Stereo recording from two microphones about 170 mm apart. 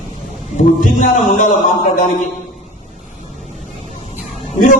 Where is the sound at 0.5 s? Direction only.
50° left (ahead or behind).